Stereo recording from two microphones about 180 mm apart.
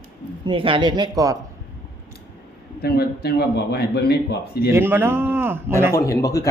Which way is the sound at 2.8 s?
60° left (ahead or behind).